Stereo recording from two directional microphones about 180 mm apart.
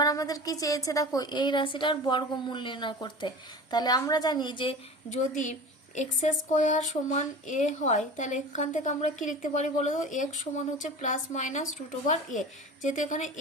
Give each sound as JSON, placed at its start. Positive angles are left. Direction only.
{"t": 0.0, "sound": "a woman's voice", "side_deg": 20}
{"t": 5.2, "sound": "speech", "side_deg": 45}